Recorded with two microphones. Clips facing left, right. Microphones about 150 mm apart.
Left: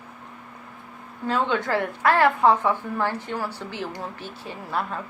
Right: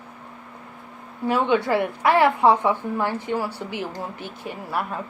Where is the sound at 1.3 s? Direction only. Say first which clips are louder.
Right 3 dB; 15° right (ahead or behind).